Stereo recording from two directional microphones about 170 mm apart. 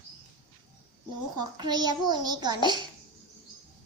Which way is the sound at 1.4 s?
25° right (ahead or behind).